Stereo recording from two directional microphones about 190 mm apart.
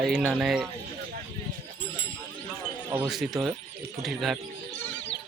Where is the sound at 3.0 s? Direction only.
Centre (ahead or behind).